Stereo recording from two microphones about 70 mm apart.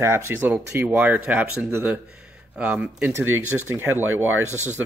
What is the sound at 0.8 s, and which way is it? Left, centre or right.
Speech, right.